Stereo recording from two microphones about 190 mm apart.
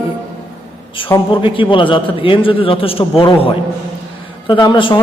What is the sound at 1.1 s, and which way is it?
A man's voice, 25° left (ahead or behind).